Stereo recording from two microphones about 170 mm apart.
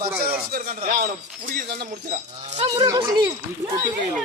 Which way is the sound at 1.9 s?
50° right (ahead or behind).